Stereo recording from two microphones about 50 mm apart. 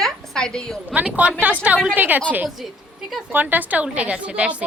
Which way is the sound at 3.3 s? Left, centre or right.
Right.